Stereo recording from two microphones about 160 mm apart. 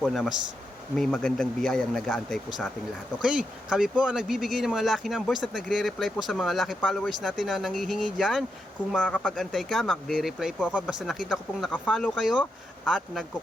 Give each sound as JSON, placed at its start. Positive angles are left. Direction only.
{"t": 0.0, "sound": "speech", "side_deg": 0}